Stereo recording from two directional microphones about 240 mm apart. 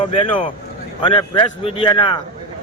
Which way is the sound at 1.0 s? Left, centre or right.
Left.